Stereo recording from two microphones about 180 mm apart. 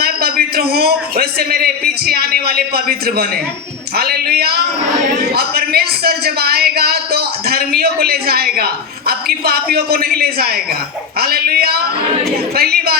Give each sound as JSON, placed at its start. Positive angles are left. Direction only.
{"t": 0.0, "sound": "speech", "side_deg": -60}